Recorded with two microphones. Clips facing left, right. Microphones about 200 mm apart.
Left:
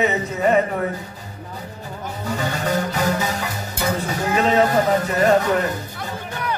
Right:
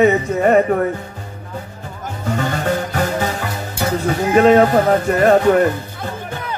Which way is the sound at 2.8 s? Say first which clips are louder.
Right 2 dB; 40° right (ahead or behind).